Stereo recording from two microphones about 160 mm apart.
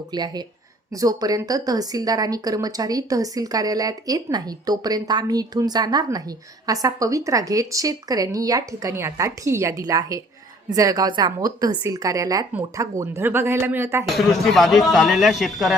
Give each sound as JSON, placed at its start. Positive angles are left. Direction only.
{"t": 0.1, "sound": "a woman's voice", "side_deg": -25}
{"t": 14.1, "sound": "speech", "side_deg": 0}